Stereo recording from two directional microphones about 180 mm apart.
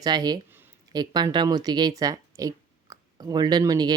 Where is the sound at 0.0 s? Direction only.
20° right (ahead or behind).